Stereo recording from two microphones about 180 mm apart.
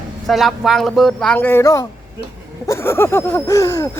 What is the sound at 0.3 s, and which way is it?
Speech, centre (ahead or behind).